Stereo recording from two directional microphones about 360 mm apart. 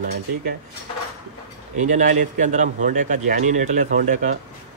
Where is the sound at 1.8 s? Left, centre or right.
Right.